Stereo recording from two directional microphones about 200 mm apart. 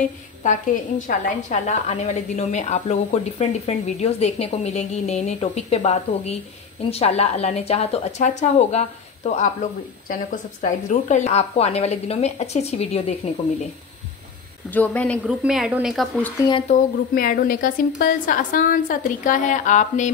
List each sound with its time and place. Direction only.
0.4 s a woman's voice: 40° left (ahead or behind)
14.7 s a woman's voice: 10° left (ahead or behind)
17.1 s a woman's voice: 45° left (ahead or behind)